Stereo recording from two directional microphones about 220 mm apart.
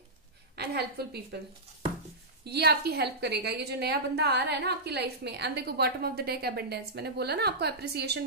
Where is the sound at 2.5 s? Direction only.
45° right (ahead or behind).